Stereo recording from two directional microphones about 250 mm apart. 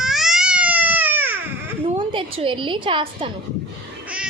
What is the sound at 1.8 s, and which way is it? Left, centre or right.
A woman's voice, right.